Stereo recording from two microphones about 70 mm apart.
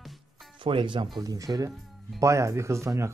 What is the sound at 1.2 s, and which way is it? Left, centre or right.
Speech, right.